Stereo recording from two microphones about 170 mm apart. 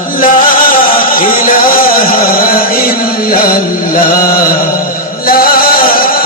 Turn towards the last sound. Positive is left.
turn(degrees=60)  # may be behind; listen again after turning